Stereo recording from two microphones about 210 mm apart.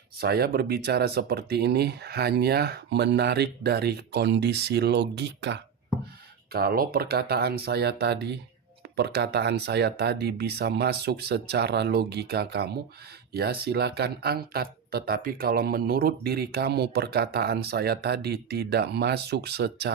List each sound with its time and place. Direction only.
0.2 s speech: 50° right (ahead or behind)